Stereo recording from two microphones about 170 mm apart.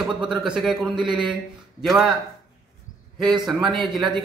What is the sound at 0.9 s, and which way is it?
Speech, 30° right (ahead or behind).